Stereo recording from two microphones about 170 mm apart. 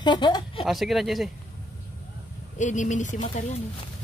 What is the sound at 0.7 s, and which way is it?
Speech, centre (ahead or behind).